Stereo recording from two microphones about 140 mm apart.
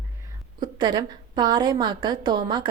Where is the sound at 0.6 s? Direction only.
30° right (ahead or behind).